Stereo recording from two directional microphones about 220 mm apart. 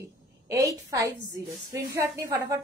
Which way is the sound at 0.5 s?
15° right (ahead or behind).